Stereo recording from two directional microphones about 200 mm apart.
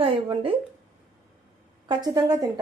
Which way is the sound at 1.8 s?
20° right (ahead or behind).